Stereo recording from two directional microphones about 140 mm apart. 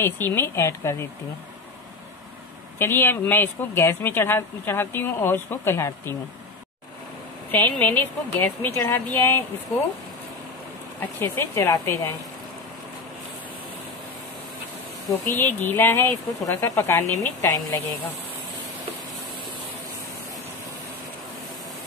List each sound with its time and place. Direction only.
0.0 s speech: 15° left (ahead or behind)
2.8 s speech: 15° left (ahead or behind)
7.8 s speech: 15° left (ahead or behind)
11.0 s speech: 15° left (ahead or behind)
15.2 s speech: 15° left (ahead or behind)